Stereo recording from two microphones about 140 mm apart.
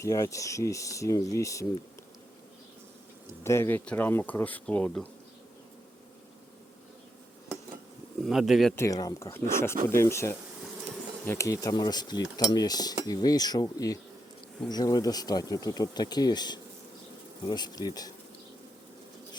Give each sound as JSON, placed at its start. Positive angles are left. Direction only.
{"t": 0.0, "sound": "speech", "side_deg": 25}
{"t": 3.4, "sound": "speech", "side_deg": 20}
{"t": 8.2, "sound": "speech", "side_deg": 0}
{"t": 8.7, "sound": "speech", "side_deg": 20}